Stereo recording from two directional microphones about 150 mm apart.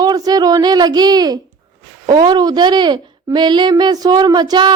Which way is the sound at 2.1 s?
30° right (ahead or behind).